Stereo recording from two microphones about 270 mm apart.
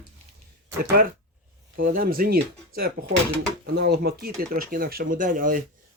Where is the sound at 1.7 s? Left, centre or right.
Right.